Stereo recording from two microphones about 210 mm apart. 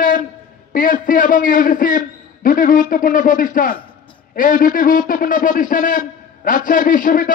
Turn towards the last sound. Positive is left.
turn(degrees=40)  # may be behind; listen again after turning